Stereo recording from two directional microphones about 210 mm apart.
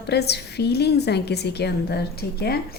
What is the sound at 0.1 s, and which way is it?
A woman's voice, 50° left (ahead or behind).